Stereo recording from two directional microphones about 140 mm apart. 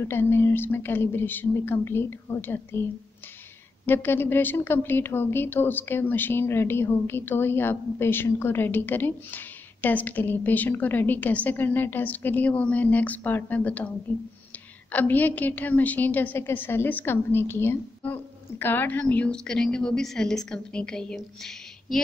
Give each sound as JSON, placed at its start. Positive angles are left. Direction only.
{"t": 0.1, "sound": "a woman's voice", "side_deg": 15}
{"t": 3.8, "sound": "a woman's voice", "side_deg": 15}